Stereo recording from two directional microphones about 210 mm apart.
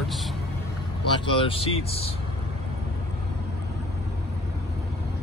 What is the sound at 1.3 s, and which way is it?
Speech, 25° left (ahead or behind).